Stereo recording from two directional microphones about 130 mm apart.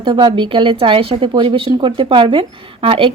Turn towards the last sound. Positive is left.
turn(degrees=-45)  # may be behind; listen again after turning